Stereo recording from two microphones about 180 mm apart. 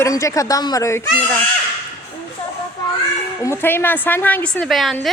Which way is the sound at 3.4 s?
15° left (ahead or behind).